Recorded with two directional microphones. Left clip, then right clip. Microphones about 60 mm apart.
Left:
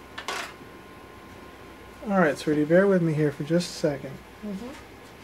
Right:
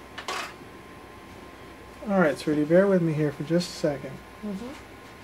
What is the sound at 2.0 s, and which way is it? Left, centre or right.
Speech, left.